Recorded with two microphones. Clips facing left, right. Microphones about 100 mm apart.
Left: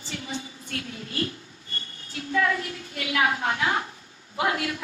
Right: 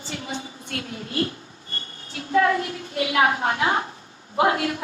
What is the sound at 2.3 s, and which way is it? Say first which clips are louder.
A woman's voice: right 5 dB; 35° right (ahead or behind).